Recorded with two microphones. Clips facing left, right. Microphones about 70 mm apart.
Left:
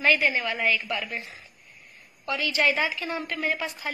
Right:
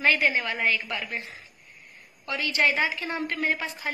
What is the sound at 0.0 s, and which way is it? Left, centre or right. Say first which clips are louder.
A woman's voice: even; right.